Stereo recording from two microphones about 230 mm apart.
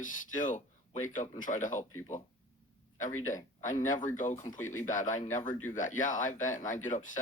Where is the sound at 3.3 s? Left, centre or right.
Left.